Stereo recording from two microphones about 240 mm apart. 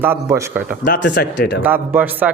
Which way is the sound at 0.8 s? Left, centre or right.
Left.